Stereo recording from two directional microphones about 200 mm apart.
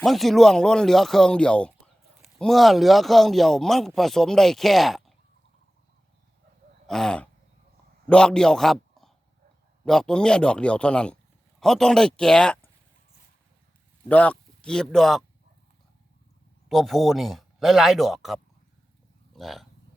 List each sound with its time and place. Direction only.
0.0 s speech: centre (ahead or behind)
6.8 s roaring cats: 5° left (ahead or behind)
8.0 s a man's voice: 5° left (ahead or behind)
14.1 s speech: 5° left (ahead or behind)
16.6 s speech: centre (ahead or behind)